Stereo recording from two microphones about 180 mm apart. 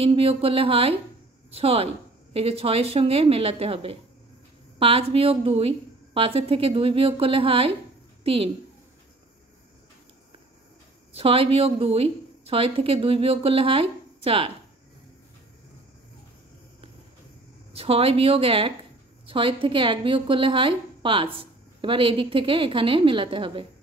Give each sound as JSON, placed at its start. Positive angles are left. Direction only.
{"t": 0.0, "sound": "a woman's voice", "side_deg": -30}
{"t": 11.1, "sound": "a woman's voice", "side_deg": -30}
{"t": 17.7, "sound": "a woman's voice", "side_deg": -35}